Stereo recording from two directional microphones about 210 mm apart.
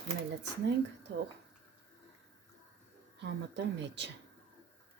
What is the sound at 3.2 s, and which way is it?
Speech, 55° right (ahead or behind).